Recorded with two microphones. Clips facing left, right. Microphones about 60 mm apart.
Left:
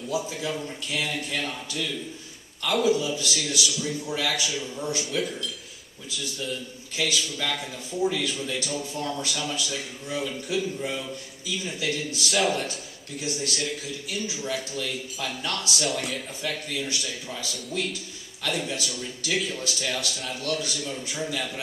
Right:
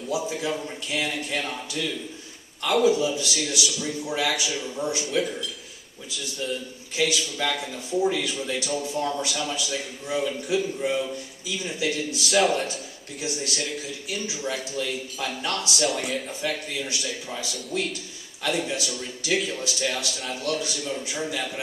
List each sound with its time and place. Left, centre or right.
0.3 s a man's voice: centre
2.6 s speech: centre
3.2 s a man's voice: centre
5.1 s a man's voice: centre
12.2 s speech: centre
13.2 s a man's voice: right
13.6 s speech: centre
14.1 s a man's voice: centre
15.8 s speech: centre
16.8 s a man's voice: centre
19.3 s speech: centre
19.6 s a man's voice: centre